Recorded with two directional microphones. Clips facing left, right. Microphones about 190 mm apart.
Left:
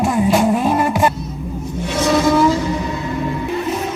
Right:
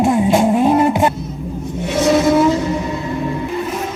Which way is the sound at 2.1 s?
20° right (ahead or behind).